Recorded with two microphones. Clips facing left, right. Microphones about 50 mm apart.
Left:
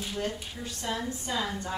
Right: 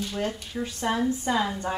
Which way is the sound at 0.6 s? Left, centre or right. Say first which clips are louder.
Right 8 dB; right.